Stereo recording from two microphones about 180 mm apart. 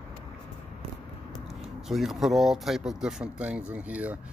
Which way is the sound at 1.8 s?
Centre (ahead or behind).